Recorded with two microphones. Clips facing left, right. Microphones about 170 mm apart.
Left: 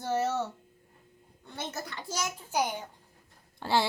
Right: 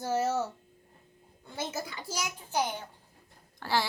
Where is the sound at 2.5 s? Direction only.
10° left (ahead or behind).